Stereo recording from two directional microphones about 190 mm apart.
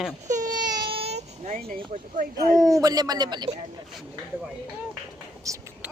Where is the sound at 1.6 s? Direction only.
45° right (ahead or behind).